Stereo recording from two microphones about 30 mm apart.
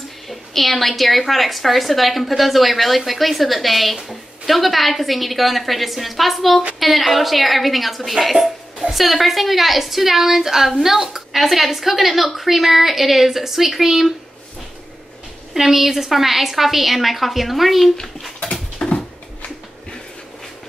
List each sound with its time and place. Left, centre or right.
0.3 s a woman's voice: centre
15.5 s a woman's voice: centre
18.4 s dog: left